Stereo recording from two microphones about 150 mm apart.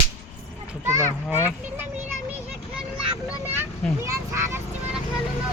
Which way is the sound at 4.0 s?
20° right (ahead or behind).